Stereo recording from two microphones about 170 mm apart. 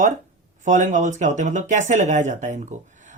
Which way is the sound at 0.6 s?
45° right (ahead or behind).